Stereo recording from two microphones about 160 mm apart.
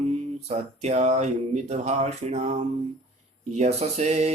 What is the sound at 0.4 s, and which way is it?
Mantra, 45° right (ahead or behind).